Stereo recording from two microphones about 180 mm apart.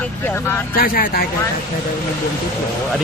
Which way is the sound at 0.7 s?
55° left (ahead or behind).